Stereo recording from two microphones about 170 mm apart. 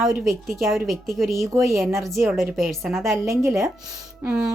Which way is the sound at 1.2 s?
Centre (ahead or behind).